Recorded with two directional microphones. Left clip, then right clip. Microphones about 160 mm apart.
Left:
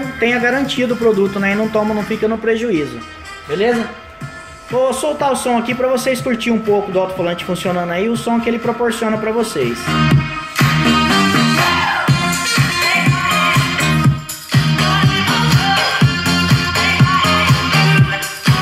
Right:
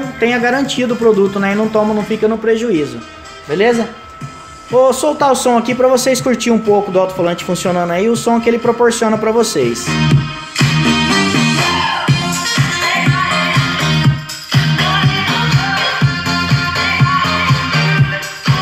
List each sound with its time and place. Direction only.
0.2 s speech: 15° right (ahead or behind)
4.8 s speech: 35° right (ahead or behind)
9.8 s speech: 15° left (ahead or behind)
10.6 s music: 15° left (ahead or behind)
12.9 s music: centre (ahead or behind); by 17.9 s 20° left (ahead or behind)